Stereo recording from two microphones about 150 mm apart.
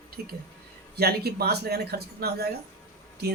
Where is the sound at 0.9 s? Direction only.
90° right.